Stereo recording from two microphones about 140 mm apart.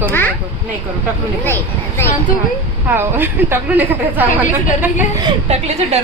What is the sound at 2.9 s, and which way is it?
A woman's voice, 15° right (ahead or behind).